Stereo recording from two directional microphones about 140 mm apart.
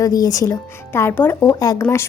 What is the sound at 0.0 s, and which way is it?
Speech, 25° left (ahead or behind).